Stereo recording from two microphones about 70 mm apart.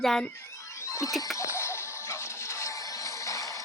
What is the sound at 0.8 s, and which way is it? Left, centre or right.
Music, left.